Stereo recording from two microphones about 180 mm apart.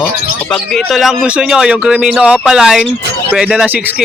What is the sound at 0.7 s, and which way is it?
Speech, centre (ahead or behind).